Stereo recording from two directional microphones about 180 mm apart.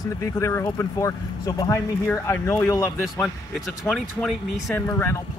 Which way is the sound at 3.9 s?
5° left (ahead or behind).